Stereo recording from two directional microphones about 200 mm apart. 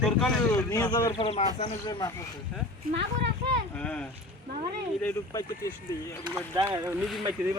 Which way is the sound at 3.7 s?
5° left (ahead or behind).